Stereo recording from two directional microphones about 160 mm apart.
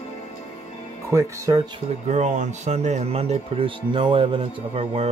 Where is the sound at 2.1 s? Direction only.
45° right (ahead or behind).